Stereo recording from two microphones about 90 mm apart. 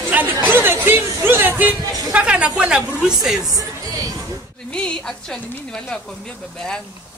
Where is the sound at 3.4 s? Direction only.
40° right (ahead or behind).